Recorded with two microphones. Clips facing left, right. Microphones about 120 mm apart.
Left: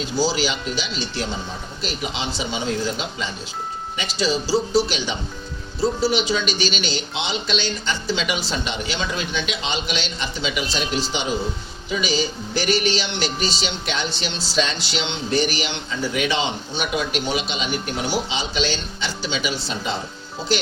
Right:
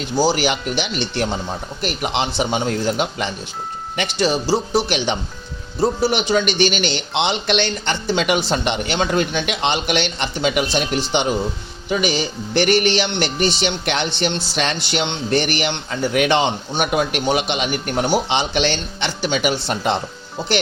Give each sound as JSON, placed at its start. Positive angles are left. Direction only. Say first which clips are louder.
{"t": 0.0, "sound": "a man's voice", "louder": "right 4 dB", "side_deg": -60}